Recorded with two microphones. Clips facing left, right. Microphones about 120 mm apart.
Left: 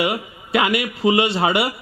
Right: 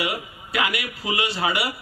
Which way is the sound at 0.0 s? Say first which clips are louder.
Left 6 dB; 25° left (ahead or behind).